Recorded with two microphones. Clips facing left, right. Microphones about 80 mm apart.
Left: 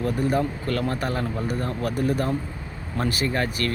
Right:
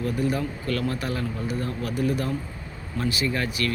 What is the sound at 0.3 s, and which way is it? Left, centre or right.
Speech, left.